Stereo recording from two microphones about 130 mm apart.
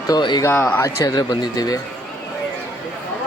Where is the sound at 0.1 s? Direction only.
35° left (ahead or behind).